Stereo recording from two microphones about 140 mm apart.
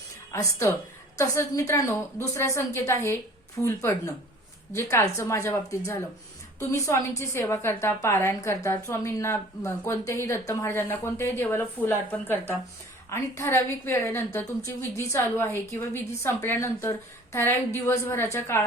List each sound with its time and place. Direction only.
0.3 s a woman's voice: 20° left (ahead or behind)